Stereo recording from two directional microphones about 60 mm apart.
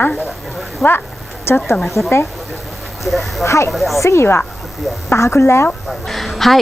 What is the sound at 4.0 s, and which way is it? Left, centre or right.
Speech, left.